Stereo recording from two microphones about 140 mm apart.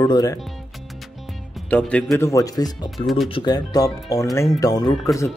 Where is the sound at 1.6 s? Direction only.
10° left (ahead or behind).